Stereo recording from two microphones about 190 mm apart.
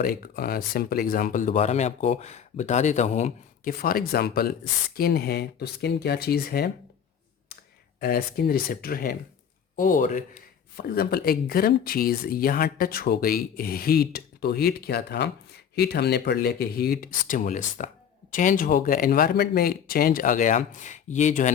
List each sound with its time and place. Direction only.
0.0 s speech: 50° left (ahead or behind)
8.0 s speech: 55° left (ahead or behind)